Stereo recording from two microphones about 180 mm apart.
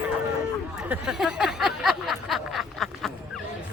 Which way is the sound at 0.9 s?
Centre (ahead or behind).